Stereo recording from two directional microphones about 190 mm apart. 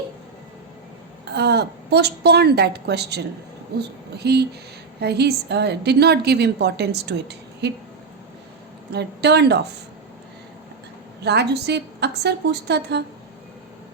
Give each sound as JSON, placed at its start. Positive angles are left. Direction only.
{"t": 1.3, "sound": "a woman's voice", "side_deg": -60}
{"t": 8.9, "sound": "a woman's voice", "side_deg": -60}
{"t": 11.2, "sound": "a woman's voice", "side_deg": -60}